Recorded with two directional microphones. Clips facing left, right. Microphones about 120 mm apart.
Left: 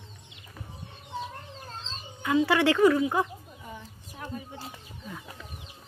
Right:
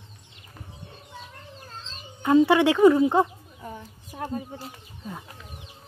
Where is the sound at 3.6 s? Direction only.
40° right (ahead or behind).